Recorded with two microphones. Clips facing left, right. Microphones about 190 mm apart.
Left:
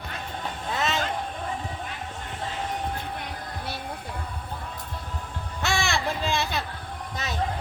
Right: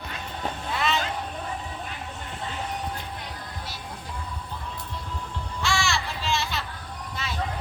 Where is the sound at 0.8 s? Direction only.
45° left (ahead or behind).